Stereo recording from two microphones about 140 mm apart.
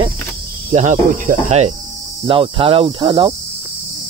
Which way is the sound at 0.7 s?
55° right (ahead or behind).